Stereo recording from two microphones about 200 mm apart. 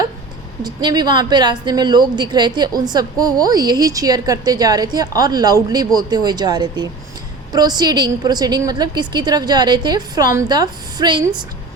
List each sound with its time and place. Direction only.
0.6 s a woman's voice: 20° right (ahead or behind)